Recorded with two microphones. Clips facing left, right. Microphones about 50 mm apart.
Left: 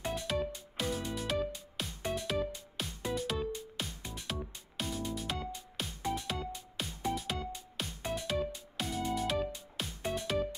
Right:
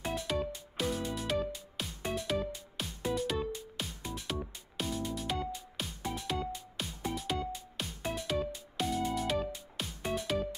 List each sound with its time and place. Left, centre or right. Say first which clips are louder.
0.1 s music: right 2 dB; centre